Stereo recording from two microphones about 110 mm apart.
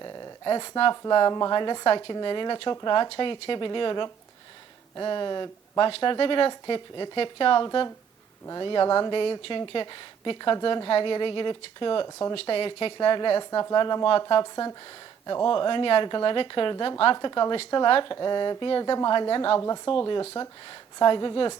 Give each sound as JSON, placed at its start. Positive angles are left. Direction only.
{"t": 0.0, "sound": "speech", "side_deg": 35}
{"t": 3.1, "sound": "a woman's voice", "side_deg": 55}
{"t": 15.4, "sound": "speech", "side_deg": 45}
{"t": 17.2, "sound": "a woman's voice", "side_deg": 40}
{"t": 19.5, "sound": "a woman's voice", "side_deg": 30}
{"t": 19.9, "sound": "speech", "side_deg": 45}